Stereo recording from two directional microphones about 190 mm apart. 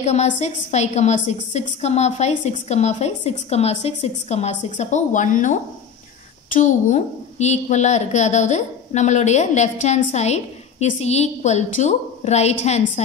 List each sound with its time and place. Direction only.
0.0 s a woman's voice: 35° left (ahead or behind)